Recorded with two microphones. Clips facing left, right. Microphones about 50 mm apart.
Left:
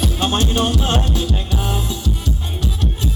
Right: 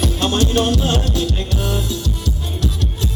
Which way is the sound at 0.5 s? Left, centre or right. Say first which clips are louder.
Right 2 dB; centre.